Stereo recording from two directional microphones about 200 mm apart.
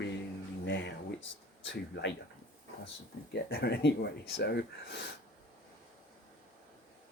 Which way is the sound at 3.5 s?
55° left (ahead or behind).